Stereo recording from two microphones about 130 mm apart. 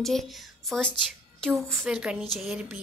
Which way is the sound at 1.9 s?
5° right (ahead or behind).